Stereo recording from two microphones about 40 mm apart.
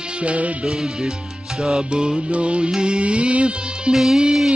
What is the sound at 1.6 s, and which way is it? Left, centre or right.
Music, right.